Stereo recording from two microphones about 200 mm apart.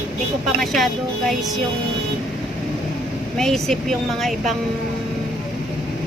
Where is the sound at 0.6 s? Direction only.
Centre (ahead or behind).